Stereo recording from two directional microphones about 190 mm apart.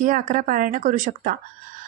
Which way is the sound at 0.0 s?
45° right (ahead or behind).